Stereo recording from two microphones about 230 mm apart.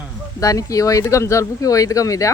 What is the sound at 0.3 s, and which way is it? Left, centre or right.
Speech, centre.